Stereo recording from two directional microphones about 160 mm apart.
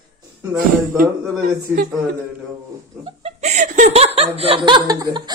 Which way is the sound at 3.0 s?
40° right (ahead or behind).